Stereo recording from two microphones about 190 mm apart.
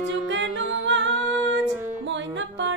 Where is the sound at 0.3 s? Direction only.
70° right (ahead or behind).